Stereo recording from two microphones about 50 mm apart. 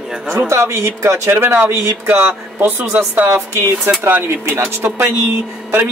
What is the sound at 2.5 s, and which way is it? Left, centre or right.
Speech, right.